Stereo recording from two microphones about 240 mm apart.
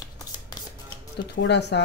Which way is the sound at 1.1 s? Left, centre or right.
Left.